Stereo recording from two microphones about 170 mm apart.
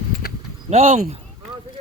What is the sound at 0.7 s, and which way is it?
Speech, 40° right (ahead or behind).